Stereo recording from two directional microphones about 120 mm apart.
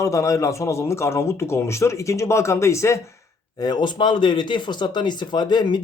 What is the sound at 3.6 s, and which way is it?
Speech, 35° left (ahead or behind).